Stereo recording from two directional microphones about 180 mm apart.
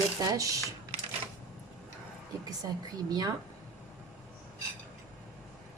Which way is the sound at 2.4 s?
20° right (ahead or behind).